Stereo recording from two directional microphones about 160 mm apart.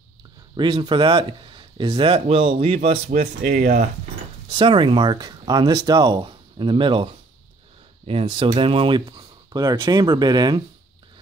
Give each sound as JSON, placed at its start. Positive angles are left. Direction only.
{"t": 0.6, "sound": "speech", "side_deg": -30}
{"t": 4.5, "sound": "speech", "side_deg": -30}